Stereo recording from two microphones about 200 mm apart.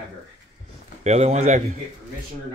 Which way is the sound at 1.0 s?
35° right (ahead or behind).